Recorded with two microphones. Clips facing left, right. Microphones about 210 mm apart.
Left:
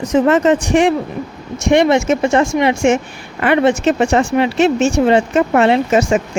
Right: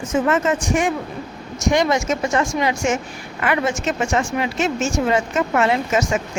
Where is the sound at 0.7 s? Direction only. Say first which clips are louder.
Left 6 dB; 70° left (ahead or behind).